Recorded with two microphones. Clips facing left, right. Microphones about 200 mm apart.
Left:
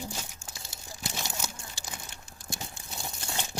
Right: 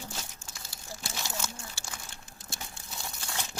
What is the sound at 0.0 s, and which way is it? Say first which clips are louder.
Crumpling: left 3 dB; 15° left (ahead or behind).